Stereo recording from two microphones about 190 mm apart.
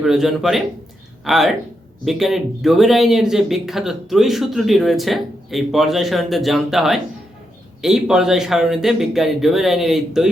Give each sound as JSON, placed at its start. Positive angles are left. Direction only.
{"t": 0.0, "sound": "speech", "side_deg": 0}